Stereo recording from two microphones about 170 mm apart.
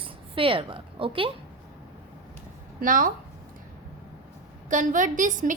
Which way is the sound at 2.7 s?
55° right (ahead or behind).